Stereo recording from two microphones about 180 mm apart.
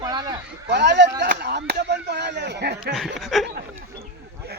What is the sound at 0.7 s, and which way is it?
Speech, 75° right (ahead or behind).